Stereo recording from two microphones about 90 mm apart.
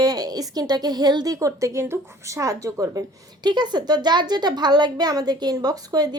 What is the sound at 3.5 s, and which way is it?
A woman's voice, 55° right (ahead or behind).